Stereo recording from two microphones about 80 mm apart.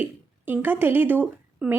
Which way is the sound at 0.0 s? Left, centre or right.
Right.